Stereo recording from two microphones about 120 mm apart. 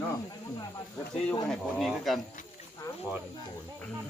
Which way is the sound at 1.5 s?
Centre (ahead or behind).